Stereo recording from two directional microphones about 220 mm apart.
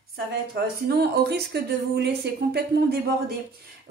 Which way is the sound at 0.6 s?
45° right (ahead or behind).